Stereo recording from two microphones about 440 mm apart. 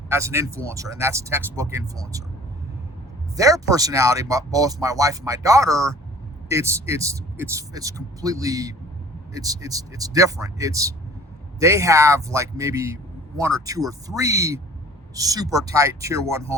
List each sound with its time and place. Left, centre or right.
0.1 s a man's voice: centre
3.3 s a man's voice: centre